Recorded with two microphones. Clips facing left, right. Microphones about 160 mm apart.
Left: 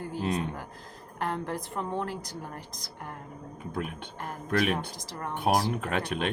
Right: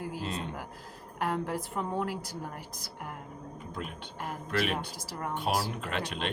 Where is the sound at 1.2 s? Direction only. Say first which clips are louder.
Even; 5° right (ahead or behind).